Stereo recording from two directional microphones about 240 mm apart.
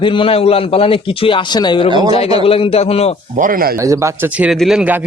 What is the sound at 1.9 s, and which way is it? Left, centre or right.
Speech, centre.